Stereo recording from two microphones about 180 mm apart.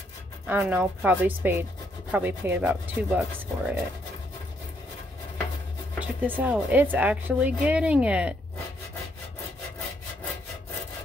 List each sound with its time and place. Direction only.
0.5 s speech: 10° right (ahead or behind)
5.9 s speech: 10° right (ahead or behind)